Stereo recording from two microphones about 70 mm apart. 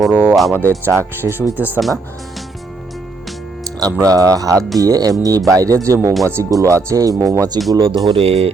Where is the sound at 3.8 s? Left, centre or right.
Right.